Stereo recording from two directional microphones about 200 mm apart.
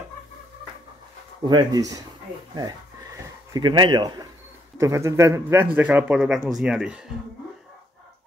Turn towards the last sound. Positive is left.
turn(degrees=-5)  # may be behind; listen again after turning